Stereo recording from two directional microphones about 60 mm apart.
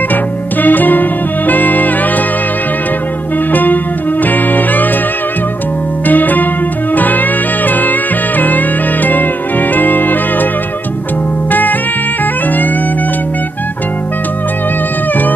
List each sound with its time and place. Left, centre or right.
0.1 s music: left
3.5 s music: left
6.0 s music: left